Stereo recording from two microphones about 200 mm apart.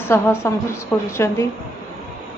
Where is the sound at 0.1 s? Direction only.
15° left (ahead or behind).